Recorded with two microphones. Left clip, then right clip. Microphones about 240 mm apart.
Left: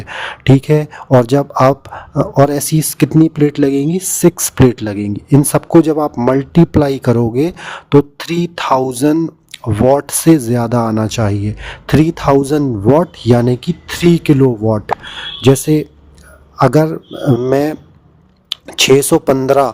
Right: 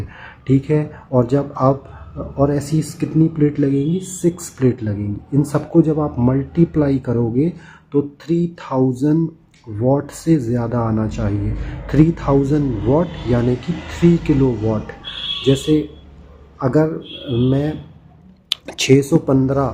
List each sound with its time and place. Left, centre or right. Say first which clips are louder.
0.1 s speech: left 7 dB; left
18.4 s a sound: left 5 dB; centre
18.9 s speech: left 5 dB; left